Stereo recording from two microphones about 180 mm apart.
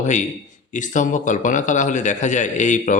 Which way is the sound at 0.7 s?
45° left (ahead or behind).